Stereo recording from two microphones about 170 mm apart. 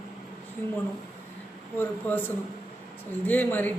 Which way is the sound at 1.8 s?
10° left (ahead or behind).